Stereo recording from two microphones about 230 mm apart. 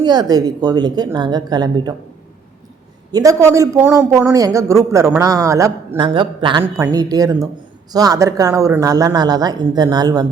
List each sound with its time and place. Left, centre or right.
0.0 s a man's voice: centre
3.1 s a man's voice: centre